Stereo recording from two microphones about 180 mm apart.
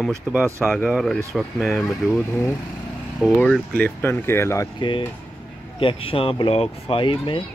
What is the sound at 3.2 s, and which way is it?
Speech, centre (ahead or behind).